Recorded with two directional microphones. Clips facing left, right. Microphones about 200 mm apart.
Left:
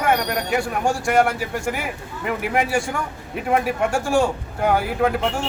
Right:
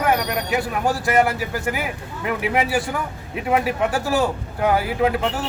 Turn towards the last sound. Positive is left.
turn(degrees=0)  # may be behind; listen again after turning